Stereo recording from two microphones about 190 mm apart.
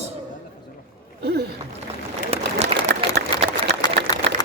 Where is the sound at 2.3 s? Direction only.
30° right (ahead or behind).